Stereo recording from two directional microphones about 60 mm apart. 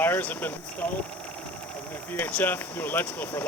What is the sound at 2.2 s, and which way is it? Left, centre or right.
Speech, left.